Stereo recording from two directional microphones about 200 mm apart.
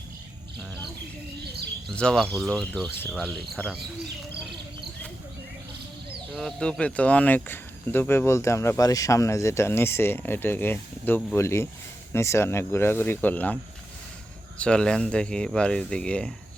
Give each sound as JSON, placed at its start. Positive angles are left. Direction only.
{"t": 1.9, "sound": "speech", "side_deg": 5}
{"t": 6.3, "sound": "speech", "side_deg": 5}
{"t": 14.6, "sound": "speech", "side_deg": 5}